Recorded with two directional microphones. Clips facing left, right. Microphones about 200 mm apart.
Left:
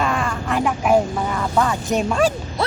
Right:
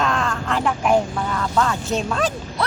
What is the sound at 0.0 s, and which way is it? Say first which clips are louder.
Speech: even; 10° left (ahead or behind).